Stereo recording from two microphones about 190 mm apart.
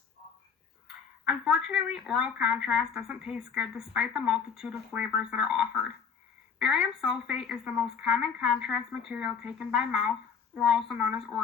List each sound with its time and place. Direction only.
1.2 s speech: 5° right (ahead or behind)